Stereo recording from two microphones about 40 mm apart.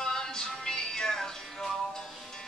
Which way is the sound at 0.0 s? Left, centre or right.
Centre.